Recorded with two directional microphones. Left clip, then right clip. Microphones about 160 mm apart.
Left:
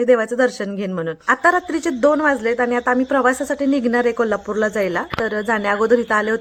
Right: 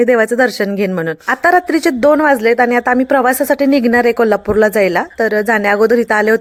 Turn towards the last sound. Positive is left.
turn(degrees=-25)  # may be behind; listen again after turning